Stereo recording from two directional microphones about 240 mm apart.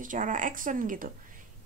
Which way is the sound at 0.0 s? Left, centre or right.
Right.